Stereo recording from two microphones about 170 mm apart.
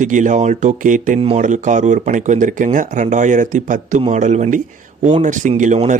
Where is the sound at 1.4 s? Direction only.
45° right (ahead or behind).